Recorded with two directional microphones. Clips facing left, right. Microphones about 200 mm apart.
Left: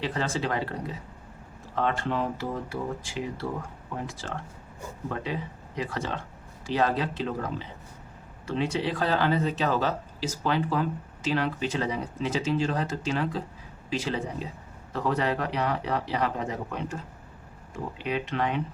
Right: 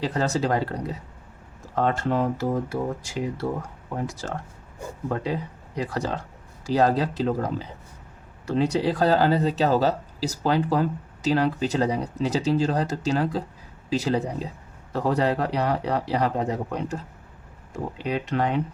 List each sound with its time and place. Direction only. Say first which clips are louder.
0.0 s speech: right 5 dB; 40° right (ahead or behind)